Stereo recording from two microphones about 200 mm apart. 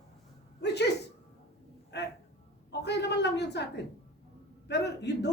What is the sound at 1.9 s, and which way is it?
A man's voice, 60° left (ahead or behind).